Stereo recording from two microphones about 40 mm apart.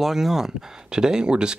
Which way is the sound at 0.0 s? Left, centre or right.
Centre.